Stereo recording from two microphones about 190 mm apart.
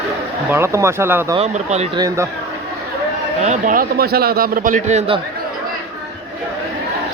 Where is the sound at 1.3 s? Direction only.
35° right (ahead or behind).